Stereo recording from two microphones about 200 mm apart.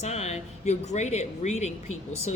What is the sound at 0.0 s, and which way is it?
Speech, 35° left (ahead or behind).